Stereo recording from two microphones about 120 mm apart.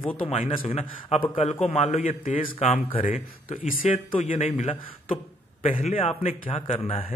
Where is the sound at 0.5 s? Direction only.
50° left (ahead or behind); by 2.8 s 65° left (ahead or behind).